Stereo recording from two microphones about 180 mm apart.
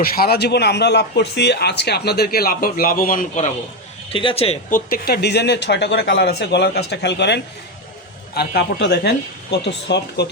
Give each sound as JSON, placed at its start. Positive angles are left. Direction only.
{"t": 0.0, "sound": "speech", "side_deg": 60}
{"t": 4.1, "sound": "a man's voice", "side_deg": 30}
{"t": 4.7, "sound": "speech", "side_deg": 55}